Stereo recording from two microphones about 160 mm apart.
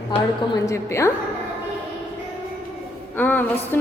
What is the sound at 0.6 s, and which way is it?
Speech, 20° left (ahead or behind).